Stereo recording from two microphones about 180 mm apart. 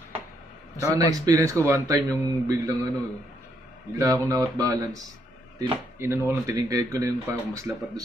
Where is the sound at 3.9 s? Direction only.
20° right (ahead or behind).